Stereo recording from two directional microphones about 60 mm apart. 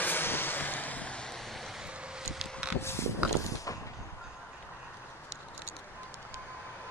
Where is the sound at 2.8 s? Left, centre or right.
Left.